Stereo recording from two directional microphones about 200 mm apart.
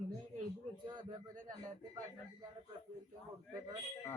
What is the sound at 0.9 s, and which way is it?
Speech, 25° right (ahead or behind).